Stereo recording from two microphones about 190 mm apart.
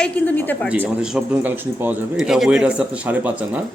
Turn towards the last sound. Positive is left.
turn(degrees=-10)  # may be behind; listen again after turning